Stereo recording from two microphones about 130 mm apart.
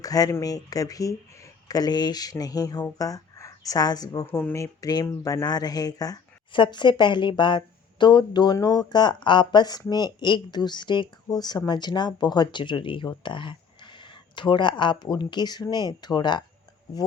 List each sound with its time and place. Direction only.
0.0 s speech: 30° left (ahead or behind)
4.3 s speech: 15° left (ahead or behind); by 16.4 s 35° left (ahead or behind)